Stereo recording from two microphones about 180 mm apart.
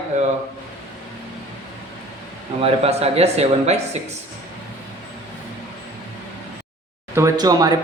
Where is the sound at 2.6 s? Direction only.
35° right (ahead or behind).